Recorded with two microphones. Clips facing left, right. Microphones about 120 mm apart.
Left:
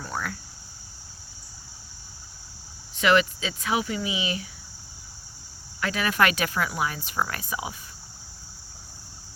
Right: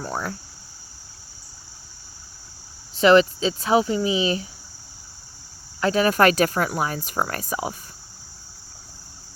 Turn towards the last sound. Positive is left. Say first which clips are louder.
# right 5 dB
turn(degrees=-45)  # may be behind; listen again after turning